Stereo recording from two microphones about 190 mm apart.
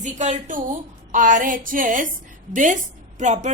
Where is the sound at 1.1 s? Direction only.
45° right (ahead or behind).